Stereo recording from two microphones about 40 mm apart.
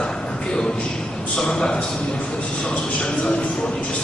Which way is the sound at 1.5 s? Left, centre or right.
Left.